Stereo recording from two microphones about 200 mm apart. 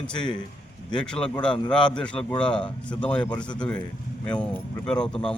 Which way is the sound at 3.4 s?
20° left (ahead or behind).